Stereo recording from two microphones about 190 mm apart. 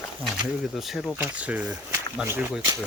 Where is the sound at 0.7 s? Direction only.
Centre (ahead or behind).